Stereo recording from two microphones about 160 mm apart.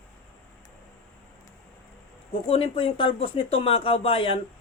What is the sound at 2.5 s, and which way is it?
Speech, 35° left (ahead or behind).